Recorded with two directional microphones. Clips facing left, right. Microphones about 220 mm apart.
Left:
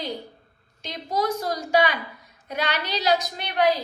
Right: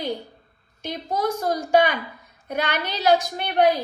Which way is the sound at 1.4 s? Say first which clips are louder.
Right 3 dB; 50° right (ahead or behind).